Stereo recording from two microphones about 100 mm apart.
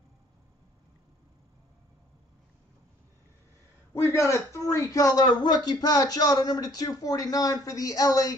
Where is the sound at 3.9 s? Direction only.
30° left (ahead or behind).